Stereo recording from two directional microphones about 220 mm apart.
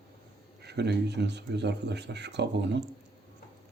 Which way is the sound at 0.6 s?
50° right (ahead or behind).